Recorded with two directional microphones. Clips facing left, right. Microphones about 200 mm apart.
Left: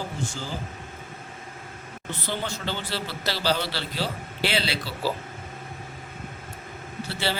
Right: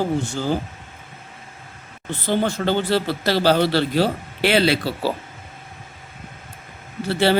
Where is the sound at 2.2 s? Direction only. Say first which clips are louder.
Right 11 dB; 50° right (ahead or behind).